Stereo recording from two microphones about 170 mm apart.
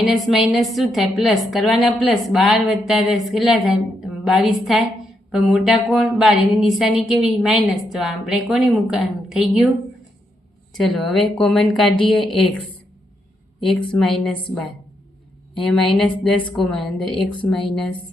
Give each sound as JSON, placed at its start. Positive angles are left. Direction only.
{"t": 0.0, "sound": "a woman's voice", "side_deg": 0}
{"t": 10.8, "sound": "a woman's voice", "side_deg": 0}
{"t": 13.6, "sound": "a woman's voice", "side_deg": 5}
{"t": 15.5, "sound": "a woman's voice", "side_deg": 0}